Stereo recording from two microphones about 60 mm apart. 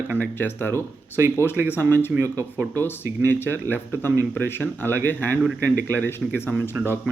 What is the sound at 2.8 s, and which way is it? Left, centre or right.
Speech, left.